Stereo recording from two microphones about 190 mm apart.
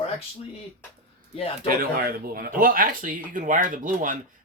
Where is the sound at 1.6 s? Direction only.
50° right (ahead or behind).